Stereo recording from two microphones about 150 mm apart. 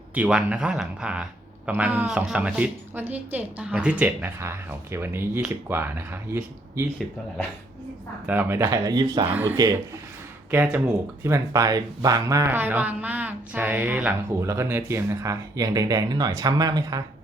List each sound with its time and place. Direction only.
0.1 s a man's voice: 5° right (ahead or behind)
8.3 s a man's voice: 15° right (ahead or behind)
9.3 s a man's voice: 10° right (ahead or behind)